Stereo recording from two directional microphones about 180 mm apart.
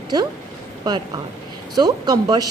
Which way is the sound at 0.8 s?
20° right (ahead or behind).